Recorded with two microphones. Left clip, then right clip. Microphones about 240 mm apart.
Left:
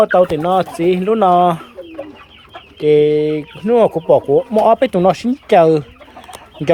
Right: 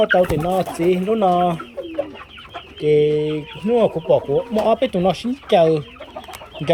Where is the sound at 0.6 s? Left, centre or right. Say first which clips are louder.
Left 4 dB; centre.